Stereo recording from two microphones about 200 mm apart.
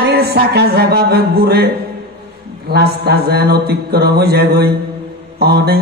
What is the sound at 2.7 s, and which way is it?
Speech, 55° right (ahead or behind).